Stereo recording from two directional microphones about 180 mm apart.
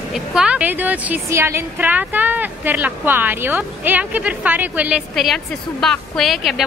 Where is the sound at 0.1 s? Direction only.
5° right (ahead or behind).